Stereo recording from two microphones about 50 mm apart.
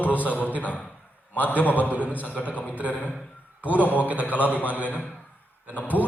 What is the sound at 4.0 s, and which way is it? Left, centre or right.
Speech, right.